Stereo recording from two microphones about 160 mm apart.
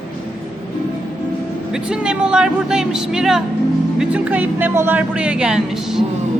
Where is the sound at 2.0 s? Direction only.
5° right (ahead or behind).